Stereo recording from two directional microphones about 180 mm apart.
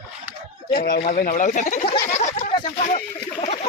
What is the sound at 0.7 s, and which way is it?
Speech, 50° left (ahead or behind).